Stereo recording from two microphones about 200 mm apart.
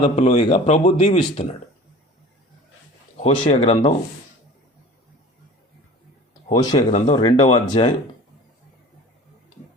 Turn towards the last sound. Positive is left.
turn(degrees=25)  # may be behind; listen again after turning